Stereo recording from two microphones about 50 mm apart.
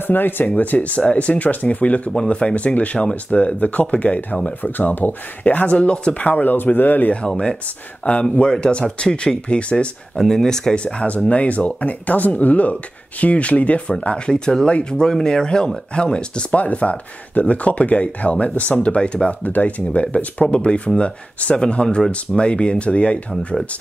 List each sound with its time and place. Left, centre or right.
0.0 s speech: left
7.1 s speech: left
10.1 s speech: centre
10.8 s speech: left